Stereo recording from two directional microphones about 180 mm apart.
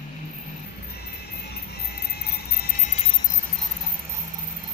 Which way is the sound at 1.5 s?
60° left (ahead or behind).